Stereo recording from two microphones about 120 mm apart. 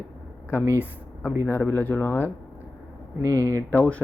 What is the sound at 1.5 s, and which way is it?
Speech, 20° left (ahead or behind).